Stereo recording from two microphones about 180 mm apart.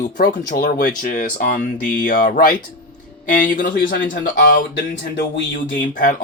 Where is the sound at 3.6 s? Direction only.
70° left (ahead or behind).